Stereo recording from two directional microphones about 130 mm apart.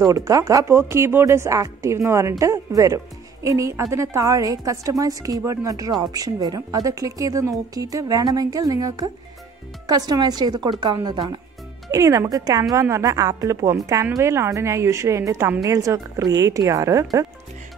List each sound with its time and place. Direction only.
0.0 s a woman's voice: 25° right (ahead or behind)